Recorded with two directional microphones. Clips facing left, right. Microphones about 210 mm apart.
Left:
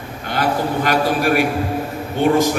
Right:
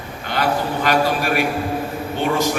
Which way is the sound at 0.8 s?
50° left (ahead or behind).